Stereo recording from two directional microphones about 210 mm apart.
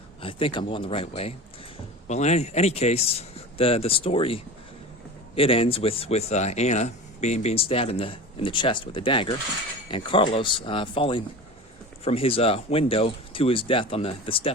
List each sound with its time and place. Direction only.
0.2 s speech: 25° left (ahead or behind)